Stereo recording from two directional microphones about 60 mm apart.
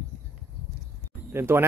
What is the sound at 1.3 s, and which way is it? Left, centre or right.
Speech, right.